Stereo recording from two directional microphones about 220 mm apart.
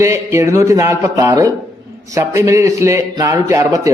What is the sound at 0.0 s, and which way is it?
A man's voice, 15° right (ahead or behind).